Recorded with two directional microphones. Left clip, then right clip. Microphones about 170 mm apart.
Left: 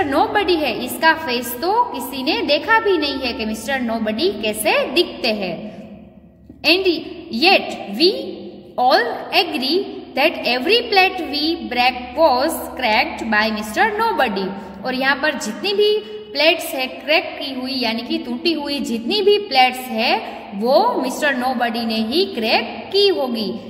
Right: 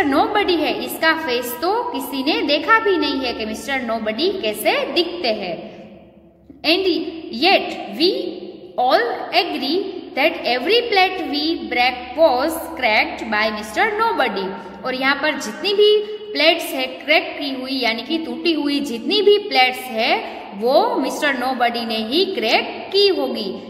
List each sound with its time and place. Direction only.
0.0 s a woman's voice: 30° left (ahead or behind)
6.6 s a woman's voice: 35° left (ahead or behind)